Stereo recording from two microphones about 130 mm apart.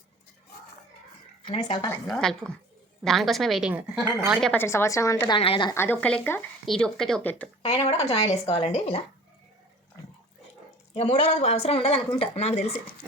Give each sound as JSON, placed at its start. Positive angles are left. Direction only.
{"t": 1.6, "sound": "a woman's voice", "side_deg": 35}
{"t": 2.0, "sound": "speech", "side_deg": 5}
{"t": 4.5, "sound": "a woman's voice", "side_deg": 20}
{"t": 5.3, "sound": "a woman's voice", "side_deg": 40}
{"t": 5.7, "sound": "speech", "side_deg": 15}
{"t": 7.6, "sound": "speech", "side_deg": 55}
{"t": 10.9, "sound": "speech", "side_deg": 55}